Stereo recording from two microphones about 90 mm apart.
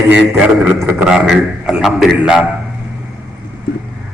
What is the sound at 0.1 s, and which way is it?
A man's voice, 20° right (ahead or behind).